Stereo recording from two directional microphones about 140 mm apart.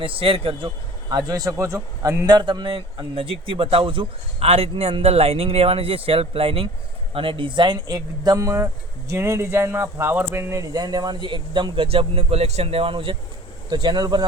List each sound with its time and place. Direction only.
0.0 s a man's voice: 40° right (ahead or behind)
1.1 s a man's voice: 25° right (ahead or behind)